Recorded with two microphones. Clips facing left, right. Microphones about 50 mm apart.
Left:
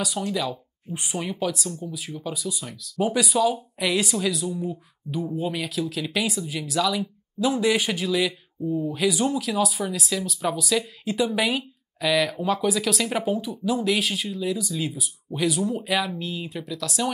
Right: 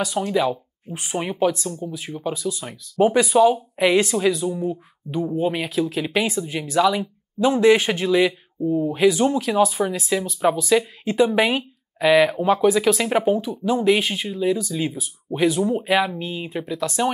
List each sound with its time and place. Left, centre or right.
0.0 s a man's voice: right